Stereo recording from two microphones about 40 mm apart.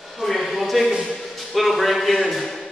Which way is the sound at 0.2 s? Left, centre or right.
Centre.